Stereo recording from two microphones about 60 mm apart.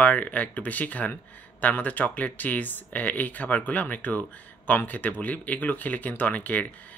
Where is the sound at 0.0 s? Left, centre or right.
Left.